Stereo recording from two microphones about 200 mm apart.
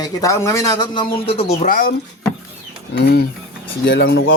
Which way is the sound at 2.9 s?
50° left (ahead or behind).